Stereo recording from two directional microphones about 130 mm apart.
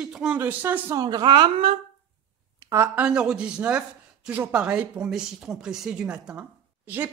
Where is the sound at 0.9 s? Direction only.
30° right (ahead or behind).